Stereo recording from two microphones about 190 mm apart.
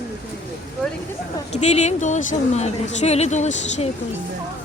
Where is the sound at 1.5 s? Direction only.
35° left (ahead or behind).